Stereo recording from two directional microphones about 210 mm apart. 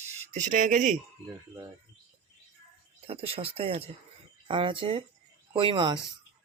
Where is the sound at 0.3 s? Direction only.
35° right (ahead or behind).